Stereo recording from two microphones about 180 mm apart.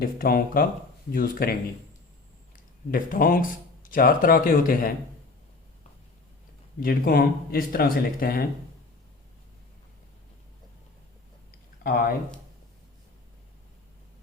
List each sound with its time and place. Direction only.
0.0 s speech: 55° left (ahead or behind)
2.9 s speech: 50° left (ahead or behind)
6.7 s speech: 55° left (ahead or behind)